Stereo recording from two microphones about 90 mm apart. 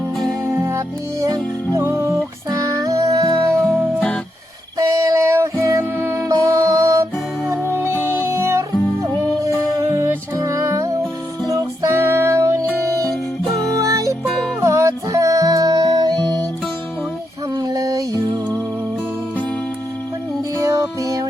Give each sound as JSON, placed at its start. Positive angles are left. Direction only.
{"t": 0.4, "sound": "music", "side_deg": -30}
{"t": 4.8, "sound": "music", "side_deg": -35}
{"t": 6.2, "sound": "music", "side_deg": -40}
{"t": 7.7, "sound": "music", "side_deg": -25}
{"t": 9.9, "sound": "music", "side_deg": -35}
{"t": 13.7, "sound": "music", "side_deg": -40}
{"t": 14.3, "sound": "music", "side_deg": 0}
{"t": 14.6, "sound": "music", "side_deg": -35}
{"t": 17.5, "sound": "music", "side_deg": -50}
{"t": 20.6, "sound": "music", "side_deg": -35}